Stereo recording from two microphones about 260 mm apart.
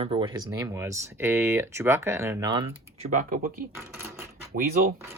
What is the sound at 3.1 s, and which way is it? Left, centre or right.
Speech, right.